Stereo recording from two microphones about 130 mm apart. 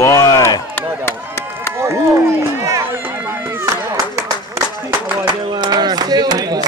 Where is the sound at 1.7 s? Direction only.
20° right (ahead or behind).